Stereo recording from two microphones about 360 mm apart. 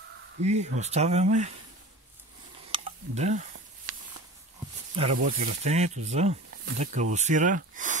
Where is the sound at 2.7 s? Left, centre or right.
Centre.